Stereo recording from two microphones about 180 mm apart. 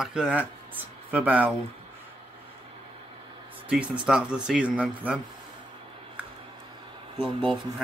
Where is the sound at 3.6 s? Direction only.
5° right (ahead or behind).